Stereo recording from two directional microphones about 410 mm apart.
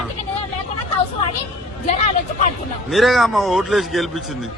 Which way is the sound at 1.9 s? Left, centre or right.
Centre.